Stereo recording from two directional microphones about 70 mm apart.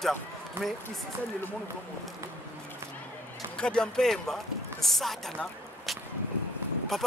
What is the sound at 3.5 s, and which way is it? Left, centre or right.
Speech, centre.